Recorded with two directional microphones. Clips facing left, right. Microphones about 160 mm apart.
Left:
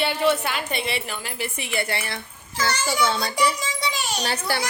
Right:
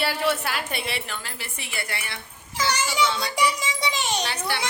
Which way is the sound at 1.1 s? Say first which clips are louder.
Left 5 dB; 15° left (ahead or behind).